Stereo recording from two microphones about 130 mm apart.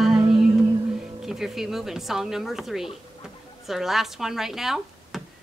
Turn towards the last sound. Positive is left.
turn(degrees=-5)  # may be behind; listen again after turning